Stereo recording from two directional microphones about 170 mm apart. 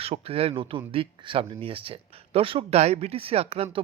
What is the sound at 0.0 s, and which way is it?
Speech, 35° right (ahead or behind).